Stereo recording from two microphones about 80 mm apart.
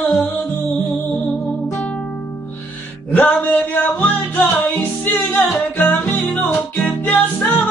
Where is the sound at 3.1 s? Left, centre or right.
Left.